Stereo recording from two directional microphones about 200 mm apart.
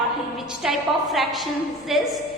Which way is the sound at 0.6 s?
Centre (ahead or behind).